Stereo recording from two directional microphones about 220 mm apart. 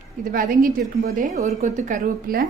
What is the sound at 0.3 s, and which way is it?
A woman's voice, 40° right (ahead or behind).